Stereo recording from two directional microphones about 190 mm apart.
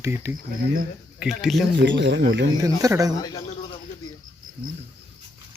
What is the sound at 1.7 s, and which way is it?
Speech, 70° right (ahead or behind).